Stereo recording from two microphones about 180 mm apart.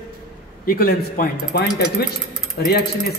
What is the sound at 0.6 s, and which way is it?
Speech, 55° left (ahead or behind).